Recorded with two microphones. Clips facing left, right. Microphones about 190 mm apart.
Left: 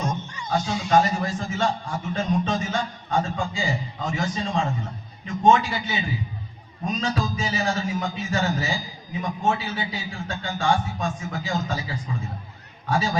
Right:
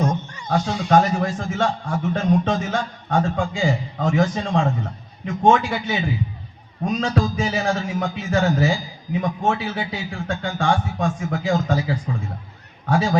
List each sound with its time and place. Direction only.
0.0 s a man's voice: 60° right (ahead or behind)